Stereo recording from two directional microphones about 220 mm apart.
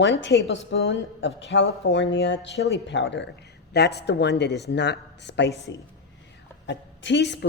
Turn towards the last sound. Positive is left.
turn(degrees=50)  # may be behind; listen again after turning